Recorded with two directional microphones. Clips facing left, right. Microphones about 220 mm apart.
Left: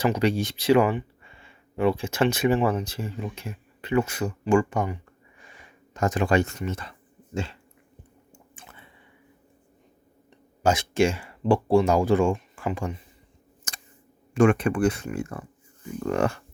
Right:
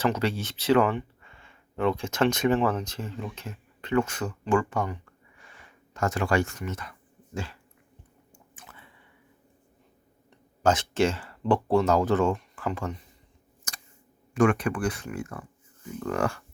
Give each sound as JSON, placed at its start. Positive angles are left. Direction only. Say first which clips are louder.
{"t": 0.0, "sound": "speech", "louder": "left 3 dB", "side_deg": 15}
{"t": 5.4, "sound": "a sound", "louder": "left 2 dB", "side_deg": 15}
{"t": 7.3, "sound": "dog", "louder": "left 4 dB", "side_deg": 25}
{"t": 8.3, "sound": "squish", "louder": "even", "side_deg": 25}
{"t": 10.6, "sound": "speech", "louder": "left 2 dB", "side_deg": 10}
{"t": 14.3, "sound": "speech", "louder": "left 3 dB", "side_deg": 25}